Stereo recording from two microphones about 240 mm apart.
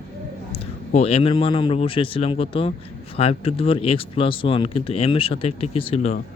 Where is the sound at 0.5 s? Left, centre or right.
Left.